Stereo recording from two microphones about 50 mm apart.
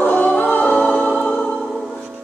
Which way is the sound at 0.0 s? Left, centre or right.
Left.